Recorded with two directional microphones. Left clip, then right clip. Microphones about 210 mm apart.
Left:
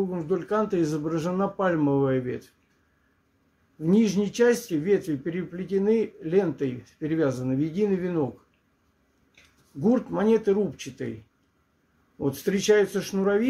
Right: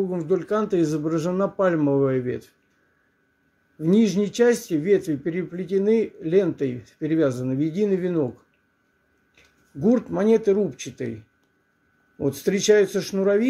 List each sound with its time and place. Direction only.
0.1 s a man's voice: 15° right (ahead or behind)
3.8 s a man's voice: 15° right (ahead or behind)
9.3 s speech: 15° right (ahead or behind)
12.2 s speech: 20° right (ahead or behind)